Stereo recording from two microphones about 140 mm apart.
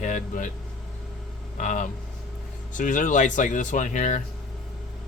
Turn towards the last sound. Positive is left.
turn(degrees=65)  # may be behind; listen again after turning